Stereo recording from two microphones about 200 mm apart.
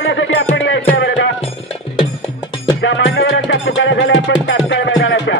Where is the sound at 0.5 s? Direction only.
65° left (ahead or behind).